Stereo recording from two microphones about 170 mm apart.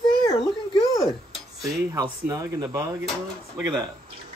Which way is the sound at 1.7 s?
20° right (ahead or behind).